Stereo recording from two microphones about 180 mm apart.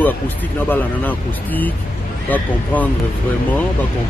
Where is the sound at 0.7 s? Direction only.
10° left (ahead or behind).